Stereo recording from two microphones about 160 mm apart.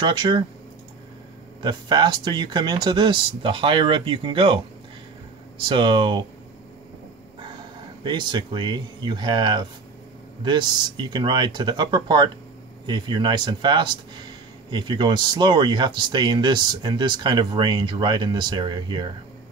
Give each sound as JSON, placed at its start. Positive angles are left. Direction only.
{"t": 0.0, "sound": "speech", "side_deg": -30}
{"t": 1.6, "sound": "speech", "side_deg": -30}
{"t": 5.6, "sound": "speech", "side_deg": -30}
{"t": 8.0, "sound": "speech", "side_deg": -30}